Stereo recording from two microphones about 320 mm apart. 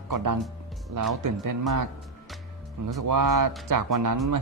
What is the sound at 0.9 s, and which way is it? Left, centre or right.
Speech, right.